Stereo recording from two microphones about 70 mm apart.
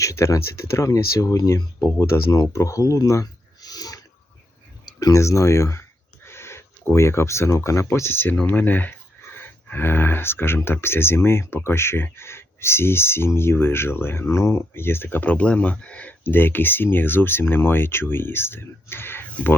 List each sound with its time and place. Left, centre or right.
0.0 s speech: left
2.5 s a sound: left
4.9 s speech: left